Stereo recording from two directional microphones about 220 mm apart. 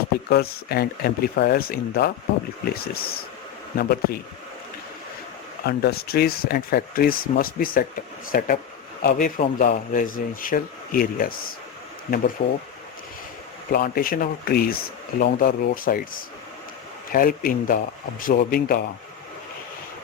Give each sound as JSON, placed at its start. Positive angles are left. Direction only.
{"t": 0.3, "sound": "speech", "side_deg": 45}
{"t": 5.6, "sound": "speech", "side_deg": 45}
{"t": 12.4, "sound": "speech", "side_deg": 40}
{"t": 13.7, "sound": "speech", "side_deg": 40}
{"t": 17.1, "sound": "speech", "side_deg": 40}